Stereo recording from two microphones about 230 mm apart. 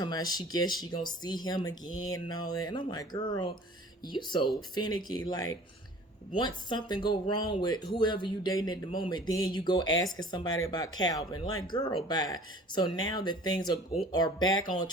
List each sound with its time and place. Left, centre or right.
0.0 s speech: centre